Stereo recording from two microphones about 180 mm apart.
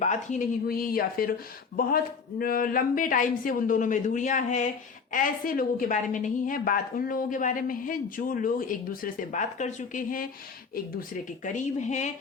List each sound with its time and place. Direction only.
0.0 s a woman's voice: 40° left (ahead or behind)